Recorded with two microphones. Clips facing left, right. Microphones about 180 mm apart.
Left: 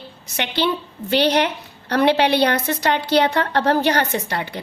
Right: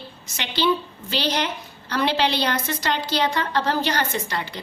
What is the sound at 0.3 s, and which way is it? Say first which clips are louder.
A woman's voice: left 1 dB; 60° left (ahead or behind).